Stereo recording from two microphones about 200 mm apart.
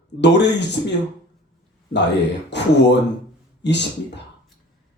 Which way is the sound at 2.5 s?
60° left (ahead or behind).